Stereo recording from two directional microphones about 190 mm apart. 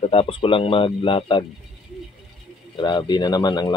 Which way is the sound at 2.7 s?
25° left (ahead or behind).